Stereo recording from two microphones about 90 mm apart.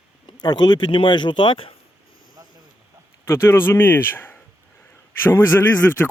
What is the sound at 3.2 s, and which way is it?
Speech, 30° left (ahead or behind).